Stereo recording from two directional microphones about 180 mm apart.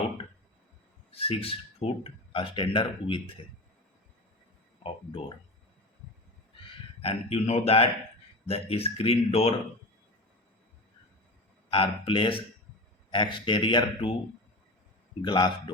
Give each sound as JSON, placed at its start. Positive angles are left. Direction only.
{"t": 1.1, "sound": "a man's voice", "side_deg": 35}
{"t": 7.0, "sound": "speech", "side_deg": 35}
{"t": 11.7, "sound": "a man's voice", "side_deg": 30}
{"t": 15.2, "sound": "a man's voice", "side_deg": 25}